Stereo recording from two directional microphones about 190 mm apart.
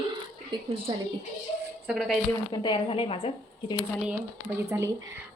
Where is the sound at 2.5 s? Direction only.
25° left (ahead or behind).